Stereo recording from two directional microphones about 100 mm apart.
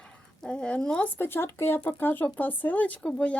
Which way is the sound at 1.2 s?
25° left (ahead or behind).